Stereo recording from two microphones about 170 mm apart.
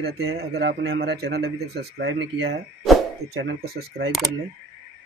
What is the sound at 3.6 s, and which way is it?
Speech, 65° right (ahead or behind).